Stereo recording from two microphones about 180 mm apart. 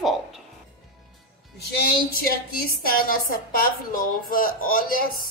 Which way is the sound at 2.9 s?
55° left (ahead or behind).